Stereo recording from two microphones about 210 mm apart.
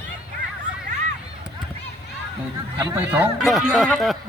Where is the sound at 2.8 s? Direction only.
10° right (ahead or behind).